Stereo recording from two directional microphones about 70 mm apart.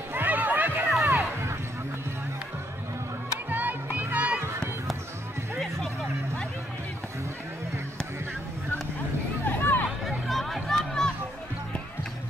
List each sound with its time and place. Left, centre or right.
0.1 s music: right
1.0 s a sound: right
3.4 s music: right
5.6 s vehicle: centre
9.5 s music: left
9.8 s a sound: centre